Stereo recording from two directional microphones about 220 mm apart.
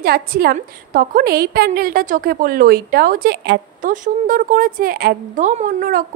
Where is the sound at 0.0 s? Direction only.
45° right (ahead or behind).